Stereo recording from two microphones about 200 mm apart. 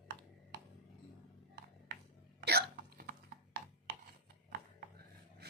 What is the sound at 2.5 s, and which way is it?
Hiccup, 50° right (ahead or behind).